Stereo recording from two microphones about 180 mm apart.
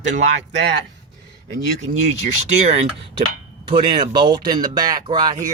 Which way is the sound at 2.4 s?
40° right (ahead or behind).